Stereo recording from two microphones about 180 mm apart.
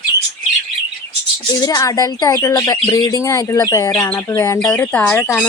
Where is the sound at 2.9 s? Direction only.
20° left (ahead or behind).